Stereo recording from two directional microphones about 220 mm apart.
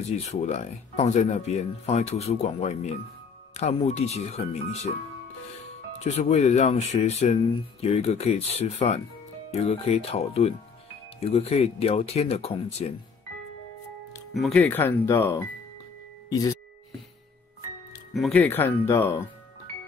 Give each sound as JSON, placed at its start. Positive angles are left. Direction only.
{"t": 0.3, "sound": "speech", "side_deg": 30}
{"t": 5.9, "sound": "speech", "side_deg": 30}
{"t": 14.3, "sound": "speech", "side_deg": 5}
{"t": 18.1, "sound": "speech", "side_deg": 5}